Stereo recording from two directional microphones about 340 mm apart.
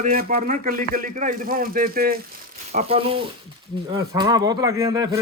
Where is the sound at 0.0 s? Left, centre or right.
Right.